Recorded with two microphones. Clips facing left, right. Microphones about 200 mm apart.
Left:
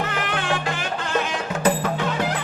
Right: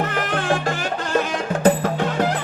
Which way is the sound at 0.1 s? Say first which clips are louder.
Right 3 dB; 45° right (ahead or behind).